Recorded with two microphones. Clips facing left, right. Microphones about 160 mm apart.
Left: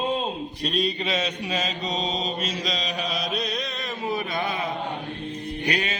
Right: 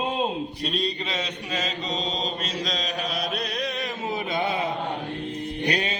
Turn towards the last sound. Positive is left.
turn(degrees=-35)  # may be behind; listen again after turning